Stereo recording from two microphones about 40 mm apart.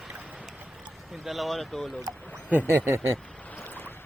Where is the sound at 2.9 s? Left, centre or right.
Right.